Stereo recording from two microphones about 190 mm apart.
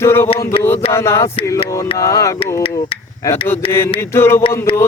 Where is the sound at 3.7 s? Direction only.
15° left (ahead or behind).